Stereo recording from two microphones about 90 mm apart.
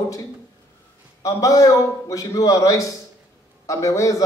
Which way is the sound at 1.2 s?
40° left (ahead or behind).